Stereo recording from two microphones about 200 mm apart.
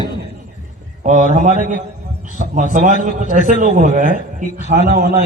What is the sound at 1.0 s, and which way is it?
A man's voice, 40° right (ahead or behind).